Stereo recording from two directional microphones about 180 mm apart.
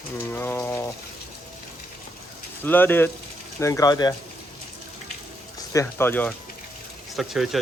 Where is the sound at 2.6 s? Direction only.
10° left (ahead or behind).